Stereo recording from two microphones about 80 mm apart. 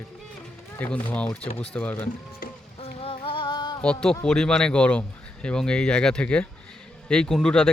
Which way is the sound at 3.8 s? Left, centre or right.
Centre.